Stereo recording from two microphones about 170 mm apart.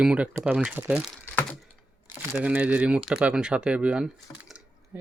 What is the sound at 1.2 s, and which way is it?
Typing, 10° left (ahead or behind).